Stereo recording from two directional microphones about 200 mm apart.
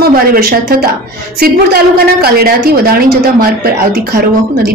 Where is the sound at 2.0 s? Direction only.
50° right (ahead or behind).